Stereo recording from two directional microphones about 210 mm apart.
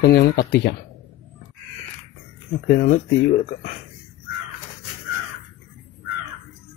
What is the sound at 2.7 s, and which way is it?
Speech, 45° left (ahead or behind).